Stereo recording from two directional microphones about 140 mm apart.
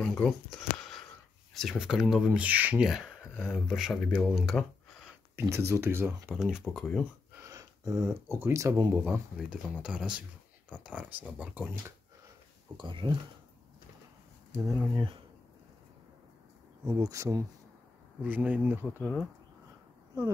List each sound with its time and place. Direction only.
0.0 s speech: 5° left (ahead or behind)
0.6 s a sound: centre (ahead or behind)
1.5 s speech: centre (ahead or behind)
5.3 s speech: 20° right (ahead or behind); by 7.1 s centre (ahead or behind)
7.3 s speech: 25° right (ahead or behind)
12.7 s speech: 35° right (ahead or behind)
14.6 s speech: 30° right (ahead or behind)
16.8 s speech: 25° right (ahead or behind)
18.2 s speech: 10° right (ahead or behind)
18.9 s speech: 5° left (ahead or behind)